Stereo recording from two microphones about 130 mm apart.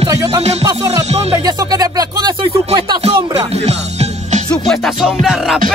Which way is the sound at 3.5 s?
55° right (ahead or behind).